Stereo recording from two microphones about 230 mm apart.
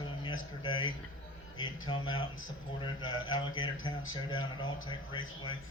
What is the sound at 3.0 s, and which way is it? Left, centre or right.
Speech, left.